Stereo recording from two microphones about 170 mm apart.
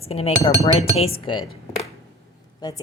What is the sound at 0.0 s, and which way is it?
Speech, 35° left (ahead or behind).